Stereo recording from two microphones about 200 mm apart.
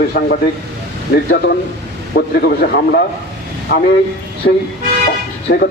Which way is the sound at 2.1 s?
50° left (ahead or behind).